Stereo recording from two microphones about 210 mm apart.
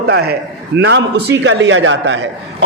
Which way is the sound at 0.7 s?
60° right (ahead or behind).